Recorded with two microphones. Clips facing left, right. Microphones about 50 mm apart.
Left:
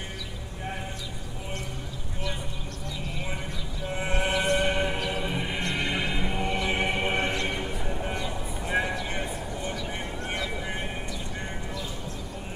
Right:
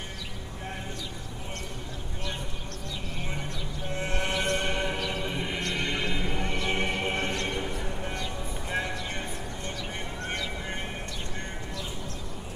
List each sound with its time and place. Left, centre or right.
3.9 s music: centre
9.1 s a sound: centre
10.2 s music: centre